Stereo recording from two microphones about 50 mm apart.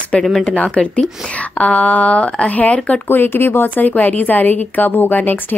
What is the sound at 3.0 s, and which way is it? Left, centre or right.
A woman's voice, left.